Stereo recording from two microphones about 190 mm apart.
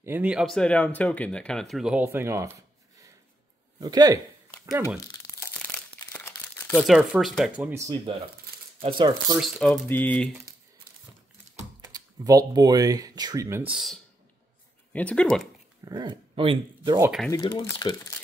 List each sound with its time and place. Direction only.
0.0 s speech: 10° right (ahead or behind)
3.8 s speech: 20° right (ahead or behind)
5.9 s crumpling: 10° left (ahead or behind)
6.8 s speech: 5° right (ahead or behind); by 9.4 s 25° right (ahead or behind)
9.4 s speech: centre (ahead or behind)
11.9 s speech: 20° right (ahead or behind); by 13.9 s 5° right (ahead or behind)
14.9 s speech: 5° left (ahead or behind)
15.8 s speech: 20° right (ahead or behind)
17.3 s speech: 20° left (ahead or behind)